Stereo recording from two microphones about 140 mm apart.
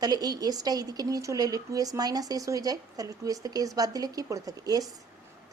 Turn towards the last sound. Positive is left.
turn(degrees=-25)  # may be behind; listen again after turning